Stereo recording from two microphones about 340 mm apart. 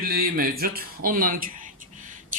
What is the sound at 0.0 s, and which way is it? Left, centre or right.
Speech, right.